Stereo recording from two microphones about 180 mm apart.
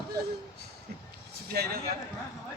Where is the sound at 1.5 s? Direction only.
60° right (ahead or behind).